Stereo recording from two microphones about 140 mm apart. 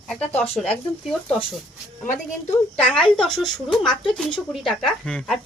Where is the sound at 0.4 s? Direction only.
45° left (ahead or behind).